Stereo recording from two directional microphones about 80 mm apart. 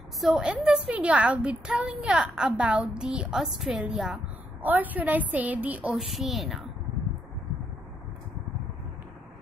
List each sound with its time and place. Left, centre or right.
0.2 s a woman's voice: centre
4.1 s a woman's voice: right
5.9 s a woman's voice: centre